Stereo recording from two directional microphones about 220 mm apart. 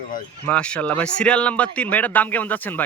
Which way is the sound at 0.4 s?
5° left (ahead or behind).